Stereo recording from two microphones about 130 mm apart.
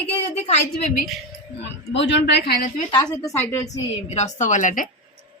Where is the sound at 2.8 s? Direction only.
30° left (ahead or behind).